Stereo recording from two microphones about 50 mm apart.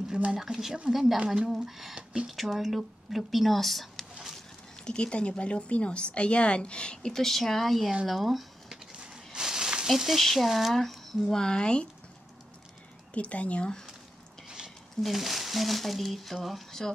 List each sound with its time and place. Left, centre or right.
0.3 s speech: centre
1.2 s speech: centre
1.6 s speech: centre
4.8 s speech: centre
7.1 s speech: centre
9.0 s a sound: centre
9.8 s speech: centre
11.3 s speech: centre
13.1 s speech: left
15.0 s speech: centre